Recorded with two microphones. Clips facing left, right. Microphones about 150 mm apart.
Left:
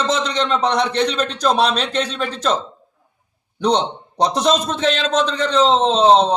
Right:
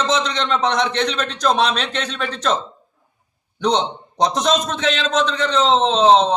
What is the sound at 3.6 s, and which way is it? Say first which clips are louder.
A man's voice: left 1 dB; 35° left (ahead or behind).